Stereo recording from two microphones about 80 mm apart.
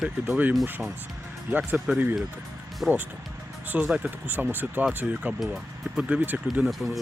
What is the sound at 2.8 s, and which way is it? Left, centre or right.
Speech, centre.